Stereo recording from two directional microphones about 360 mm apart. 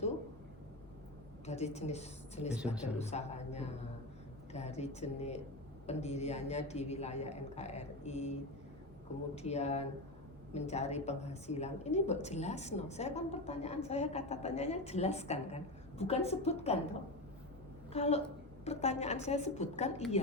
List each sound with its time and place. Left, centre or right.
1.5 s a woman's voice: centre
17.9 s a woman's voice: centre